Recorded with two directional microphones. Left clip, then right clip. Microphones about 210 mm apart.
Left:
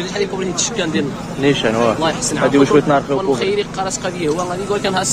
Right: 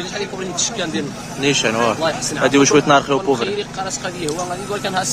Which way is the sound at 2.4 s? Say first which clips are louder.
Even; 25° right (ahead or behind).